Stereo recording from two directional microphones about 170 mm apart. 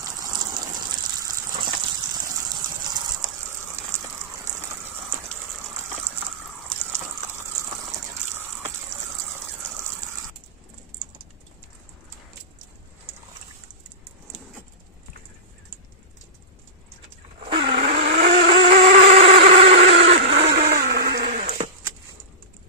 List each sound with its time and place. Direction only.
0.0 s gush: 20° right (ahead or behind)
2.3 s a sound: 25° right (ahead or behind)
5.7 s gush: 40° right (ahead or behind)
17.4 s vehicle: 30° right (ahead or behind)
20.3 s vehicle: 70° right (ahead or behind)
21.2 s sheep: 45° right (ahead or behind)